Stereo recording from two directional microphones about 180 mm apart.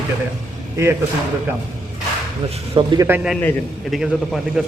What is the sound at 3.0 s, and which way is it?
A man's voice, 5° right (ahead or behind).